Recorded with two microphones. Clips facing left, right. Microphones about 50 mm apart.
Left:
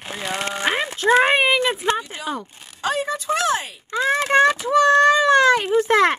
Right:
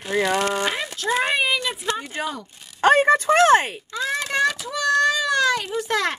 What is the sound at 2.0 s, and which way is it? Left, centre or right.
Speech, right.